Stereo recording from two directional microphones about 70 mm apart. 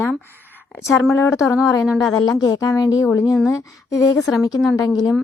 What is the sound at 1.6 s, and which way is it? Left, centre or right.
A woman's voice, left.